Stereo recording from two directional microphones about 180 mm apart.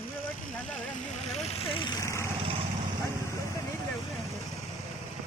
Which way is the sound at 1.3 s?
30° left (ahead or behind).